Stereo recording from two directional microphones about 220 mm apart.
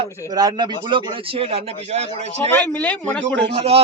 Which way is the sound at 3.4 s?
25° right (ahead or behind).